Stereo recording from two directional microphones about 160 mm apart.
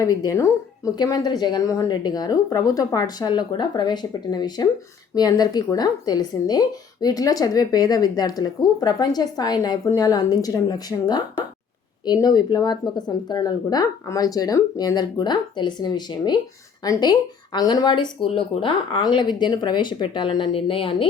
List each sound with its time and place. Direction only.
0.0 s speech: 20° left (ahead or behind)